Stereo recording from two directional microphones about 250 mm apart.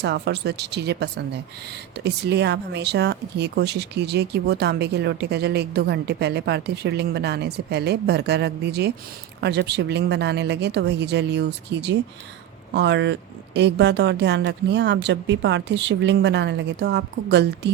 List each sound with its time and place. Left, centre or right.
0.0 s speech: right